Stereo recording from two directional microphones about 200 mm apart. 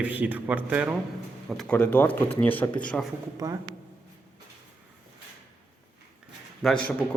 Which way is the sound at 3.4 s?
15° right (ahead or behind).